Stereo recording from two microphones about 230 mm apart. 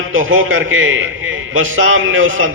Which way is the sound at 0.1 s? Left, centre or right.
Right.